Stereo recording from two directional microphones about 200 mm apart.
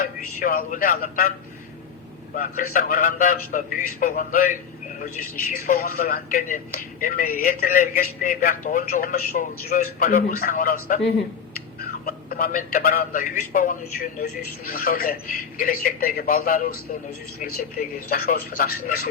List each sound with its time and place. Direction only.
0.0 s speech: 45° left (ahead or behind)
2.3 s speech: 45° left (ahead or behind)
12.0 s speech: 45° left (ahead or behind)